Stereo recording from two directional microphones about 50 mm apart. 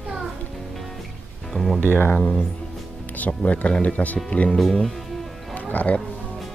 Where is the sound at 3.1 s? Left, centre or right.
Left.